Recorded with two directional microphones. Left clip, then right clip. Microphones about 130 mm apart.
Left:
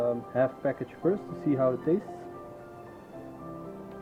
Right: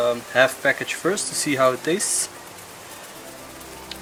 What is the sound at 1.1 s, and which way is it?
Speech, 55° left (ahead or behind).